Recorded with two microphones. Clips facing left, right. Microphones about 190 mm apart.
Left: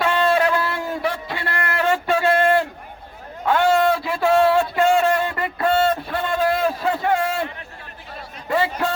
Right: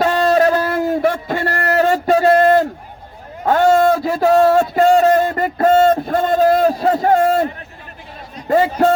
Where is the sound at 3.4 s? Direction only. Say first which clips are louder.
Right 5 dB; 40° right (ahead or behind).